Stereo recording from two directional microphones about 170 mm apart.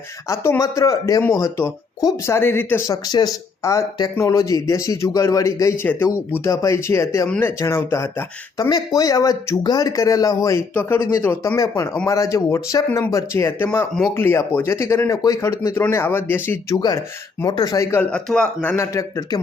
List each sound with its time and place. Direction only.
0.3 s speech: 15° left (ahead or behind)
13.7 s speech: 5° left (ahead or behind); by 18.0 s 20° left (ahead or behind)
18.1 s speech: 5° left (ahead or behind)